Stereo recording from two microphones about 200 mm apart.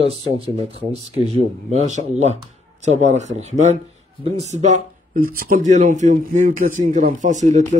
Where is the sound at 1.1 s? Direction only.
30° right (ahead or behind).